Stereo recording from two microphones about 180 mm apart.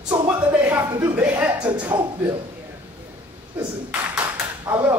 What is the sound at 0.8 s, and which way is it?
Chuckle, 15° right (ahead or behind).